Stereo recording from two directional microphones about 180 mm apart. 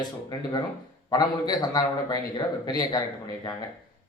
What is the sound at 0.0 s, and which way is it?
A man's voice, 20° left (ahead or behind).